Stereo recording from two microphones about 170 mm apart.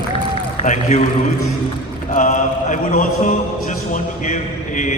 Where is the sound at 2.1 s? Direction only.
45° left (ahead or behind).